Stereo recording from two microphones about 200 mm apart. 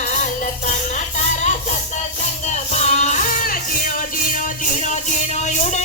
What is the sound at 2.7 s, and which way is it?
Music, 35° left (ahead or behind).